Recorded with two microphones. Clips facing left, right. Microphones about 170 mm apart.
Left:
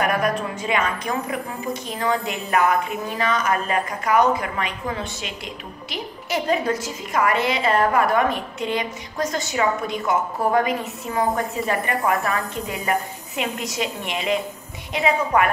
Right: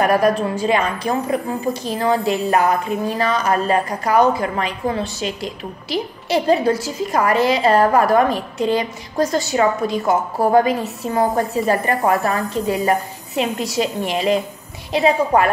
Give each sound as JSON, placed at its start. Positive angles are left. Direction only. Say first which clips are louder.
{"t": 0.0, "sound": "a woman's voice", "louder": "right 6 dB", "side_deg": -35}